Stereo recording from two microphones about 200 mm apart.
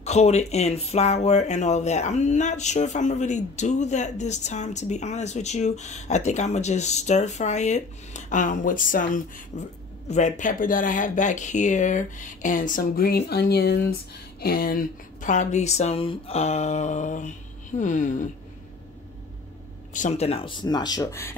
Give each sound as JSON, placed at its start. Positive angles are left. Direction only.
{"t": 0.0, "sound": "speech", "side_deg": 35}
{"t": 19.9, "sound": "speech", "side_deg": 35}